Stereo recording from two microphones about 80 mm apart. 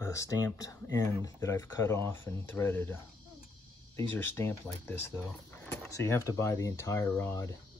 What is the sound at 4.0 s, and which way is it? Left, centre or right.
Speech, left.